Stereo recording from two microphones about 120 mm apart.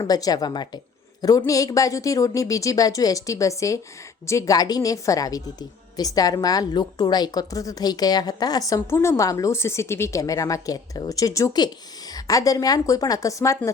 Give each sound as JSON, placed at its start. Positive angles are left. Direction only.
{"t": 0.0, "sound": "a woman's voice", "side_deg": 30}